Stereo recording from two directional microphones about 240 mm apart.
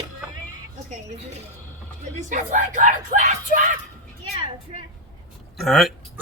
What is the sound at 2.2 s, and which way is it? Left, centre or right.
Speech, right.